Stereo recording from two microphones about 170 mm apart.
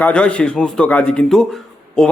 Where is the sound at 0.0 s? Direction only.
5° left (ahead or behind).